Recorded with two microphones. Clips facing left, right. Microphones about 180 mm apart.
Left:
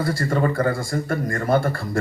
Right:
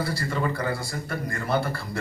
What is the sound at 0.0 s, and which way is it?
A man's voice, 50° left (ahead or behind).